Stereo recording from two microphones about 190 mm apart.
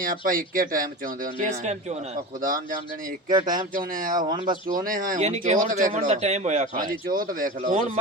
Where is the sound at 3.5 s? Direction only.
45° right (ahead or behind).